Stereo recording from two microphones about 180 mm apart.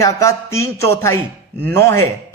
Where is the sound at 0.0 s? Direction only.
15° left (ahead or behind).